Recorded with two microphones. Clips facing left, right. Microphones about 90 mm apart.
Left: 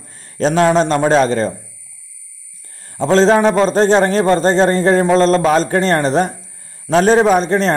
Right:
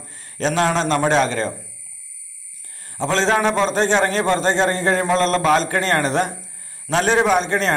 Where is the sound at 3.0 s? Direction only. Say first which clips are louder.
Left 7 dB; 40° left (ahead or behind).